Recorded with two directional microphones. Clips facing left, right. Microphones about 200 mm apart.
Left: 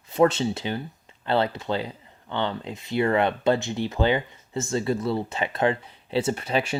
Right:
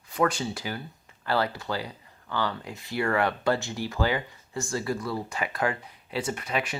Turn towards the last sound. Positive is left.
turn(degrees=30)  # may be behind; listen again after turning